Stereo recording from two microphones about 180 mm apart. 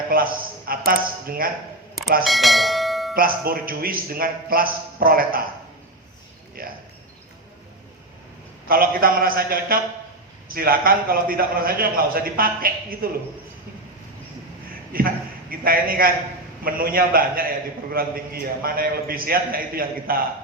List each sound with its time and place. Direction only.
0.1 s a man's voice: 55° right (ahead or behind)
2.2 s bell: centre (ahead or behind)
3.2 s a man's voice: 55° right (ahead or behind)
6.6 s a man's voice: 50° right (ahead or behind)
8.6 s a man's voice: 55° right (ahead or behind)
14.9 s a man's voice: 55° right (ahead or behind)